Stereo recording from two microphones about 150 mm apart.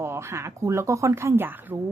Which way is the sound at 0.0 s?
15° right (ahead or behind).